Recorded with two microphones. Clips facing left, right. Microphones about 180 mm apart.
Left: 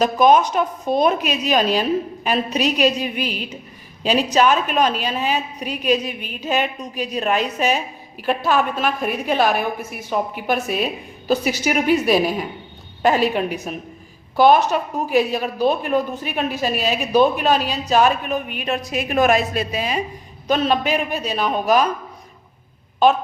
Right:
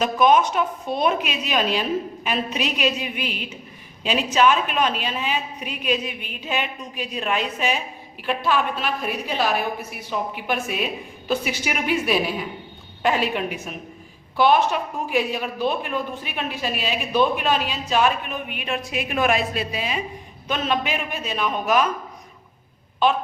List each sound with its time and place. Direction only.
0.0 s a woman's voice: 40° left (ahead or behind)
23.0 s a woman's voice: 40° left (ahead or behind)